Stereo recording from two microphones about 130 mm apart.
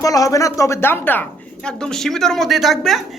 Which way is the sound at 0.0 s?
25° left (ahead or behind).